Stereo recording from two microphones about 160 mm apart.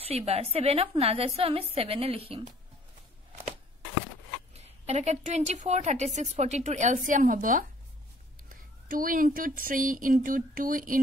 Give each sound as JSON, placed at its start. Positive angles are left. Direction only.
{"t": 0.0, "sound": "a woman's voice", "side_deg": -40}
{"t": 4.6, "sound": "a woman's voice", "side_deg": -45}
{"t": 8.8, "sound": "speech", "side_deg": -60}